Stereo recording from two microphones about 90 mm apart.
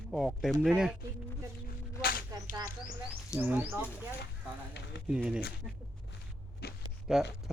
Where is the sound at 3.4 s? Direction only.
20° right (ahead or behind).